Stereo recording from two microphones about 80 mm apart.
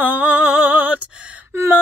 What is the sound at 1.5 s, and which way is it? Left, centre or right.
Gasp, right.